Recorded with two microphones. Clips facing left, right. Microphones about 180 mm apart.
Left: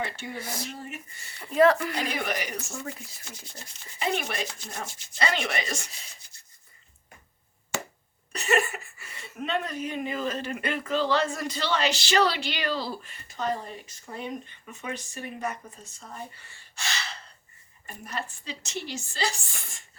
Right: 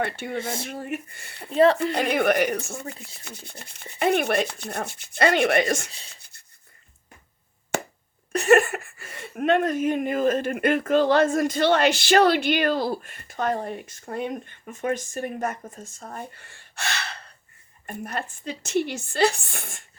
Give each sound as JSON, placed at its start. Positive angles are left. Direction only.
{"t": 0.0, "sound": "rub", "side_deg": -60}
{"t": 0.3, "sound": "speech", "side_deg": -25}
{"t": 0.7, "sound": "rub", "side_deg": -60}
{"t": 1.5, "sound": "speech", "side_deg": -30}
{"t": 2.0, "sound": "rub", "side_deg": -60}
{"t": 7.7, "sound": "a sound", "side_deg": -55}
{"t": 8.3, "sound": "speech", "side_deg": -55}
{"t": 17.8, "sound": "rub", "side_deg": -55}